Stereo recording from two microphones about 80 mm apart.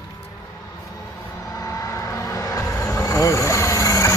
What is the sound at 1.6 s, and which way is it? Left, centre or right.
Vehicle, left.